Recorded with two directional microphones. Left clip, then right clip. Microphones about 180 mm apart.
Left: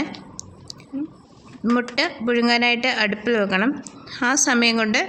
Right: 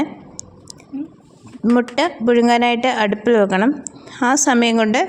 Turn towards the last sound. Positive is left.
turn(degrees=-25)  # may be behind; listen again after turning